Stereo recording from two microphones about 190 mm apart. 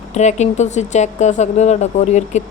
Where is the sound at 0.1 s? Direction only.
35° left (ahead or behind).